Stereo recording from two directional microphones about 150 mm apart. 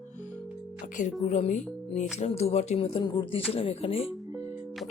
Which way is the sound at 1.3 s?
45° left (ahead or behind).